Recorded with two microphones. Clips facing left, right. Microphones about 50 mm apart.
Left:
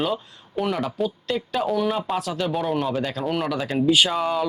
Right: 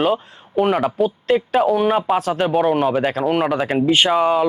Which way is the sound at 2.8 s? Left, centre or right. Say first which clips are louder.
Right 7 dB; right.